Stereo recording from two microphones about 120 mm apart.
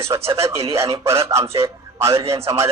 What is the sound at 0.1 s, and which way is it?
A man's voice, 35° right (ahead or behind).